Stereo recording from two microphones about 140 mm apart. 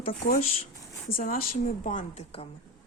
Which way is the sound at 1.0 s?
90° left.